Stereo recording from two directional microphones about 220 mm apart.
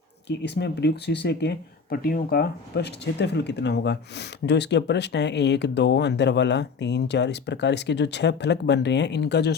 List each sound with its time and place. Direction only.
0.3 s speech: 50° left (ahead or behind)